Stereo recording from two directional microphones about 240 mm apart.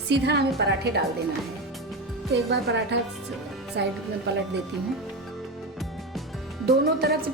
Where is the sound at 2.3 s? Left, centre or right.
Right.